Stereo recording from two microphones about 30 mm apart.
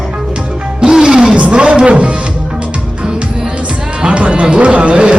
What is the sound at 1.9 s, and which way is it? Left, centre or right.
Speech, right.